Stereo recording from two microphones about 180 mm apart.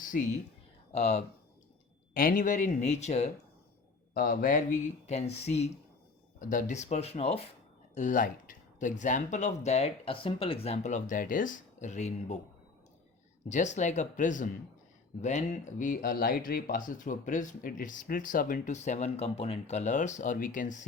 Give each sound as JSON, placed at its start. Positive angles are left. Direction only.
{"t": 0.1, "sound": "speech", "side_deg": 50}
{"t": 0.9, "sound": "speech", "side_deg": 35}
{"t": 2.1, "sound": "speech", "side_deg": 50}
{"t": 4.1, "sound": "speech", "side_deg": 55}
{"t": 6.4, "sound": "speech", "side_deg": 45}
{"t": 7.9, "sound": "speech", "side_deg": 45}
{"t": 13.5, "sound": "speech", "side_deg": 40}